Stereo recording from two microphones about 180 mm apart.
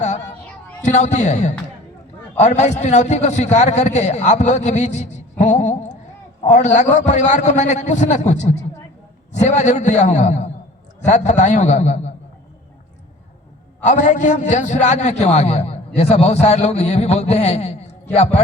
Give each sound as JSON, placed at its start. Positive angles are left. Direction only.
{"t": 0.0, "sound": "a sound", "side_deg": 40}
{"t": 0.8, "sound": "a man's voice", "side_deg": 40}
{"t": 13.8, "sound": "a man's voice", "side_deg": 45}